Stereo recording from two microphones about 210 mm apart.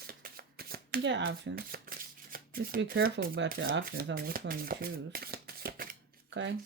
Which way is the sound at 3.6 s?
70° right (ahead or behind).